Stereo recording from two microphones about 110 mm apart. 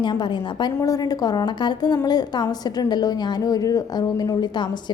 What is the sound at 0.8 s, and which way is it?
A woman's voice, 30° left (ahead or behind).